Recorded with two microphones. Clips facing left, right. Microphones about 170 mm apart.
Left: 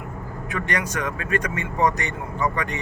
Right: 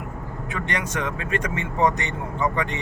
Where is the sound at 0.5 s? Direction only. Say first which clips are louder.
Left 1 dB; 25° right (ahead or behind).